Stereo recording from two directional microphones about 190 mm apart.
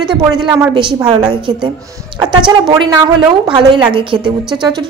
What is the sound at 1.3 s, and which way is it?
Speech, 25° right (ahead or behind).